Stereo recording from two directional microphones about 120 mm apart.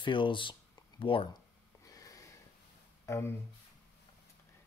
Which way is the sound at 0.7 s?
45° left (ahead or behind).